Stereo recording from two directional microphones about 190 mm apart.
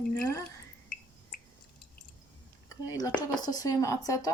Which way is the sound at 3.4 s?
20° left (ahead or behind).